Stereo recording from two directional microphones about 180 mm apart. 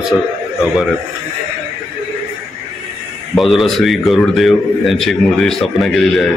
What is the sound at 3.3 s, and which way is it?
A man's voice, centre (ahead or behind).